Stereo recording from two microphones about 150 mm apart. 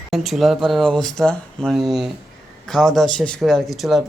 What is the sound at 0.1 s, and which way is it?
A man's voice, centre (ahead or behind).